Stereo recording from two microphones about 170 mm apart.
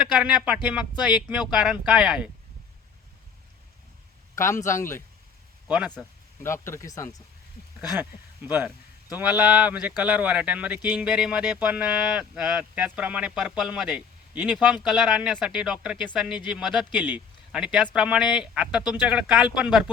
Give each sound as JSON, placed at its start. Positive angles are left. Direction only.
{"t": 0.2, "sound": "speech", "side_deg": -5}
{"t": 4.4, "sound": "speech", "side_deg": 15}
{"t": 5.6, "sound": "speech", "side_deg": -5}
{"t": 6.4, "sound": "speech", "side_deg": 15}
{"t": 7.8, "sound": "speech", "side_deg": -10}